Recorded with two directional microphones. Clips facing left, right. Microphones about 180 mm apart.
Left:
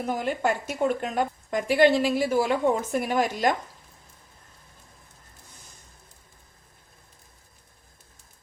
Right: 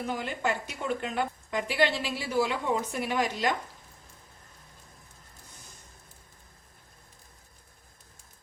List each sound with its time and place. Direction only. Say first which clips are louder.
0.0 s a woman's voice: left 5 dB; 45° left (ahead or behind)